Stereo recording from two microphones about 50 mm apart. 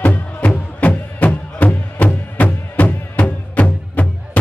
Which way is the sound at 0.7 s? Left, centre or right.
Left.